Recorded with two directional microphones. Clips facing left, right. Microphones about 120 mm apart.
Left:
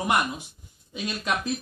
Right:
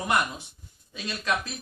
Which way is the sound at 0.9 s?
15° left (ahead or behind).